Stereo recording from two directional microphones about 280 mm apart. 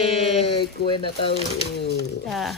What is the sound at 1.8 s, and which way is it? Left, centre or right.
Speech, left.